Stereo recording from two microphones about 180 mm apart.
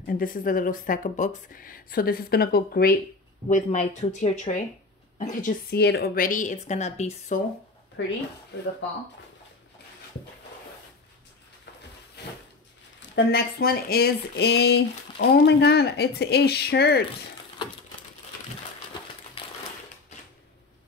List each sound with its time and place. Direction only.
0.0 s speech: 50° left (ahead or behind)
3.4 s speech: 45° left (ahead or behind)
5.7 s speech: 65° left (ahead or behind); by 7.4 s 40° left (ahead or behind)
8.0 s speech: 90° left
12.2 s a sound: 65° left (ahead or behind)
13.1 s speech: 60° left (ahead or behind)
19.4 s typewriter: 30° left (ahead or behind)